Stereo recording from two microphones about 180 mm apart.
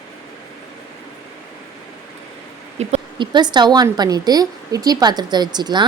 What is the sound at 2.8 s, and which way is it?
A woman's voice, 35° right (ahead or behind).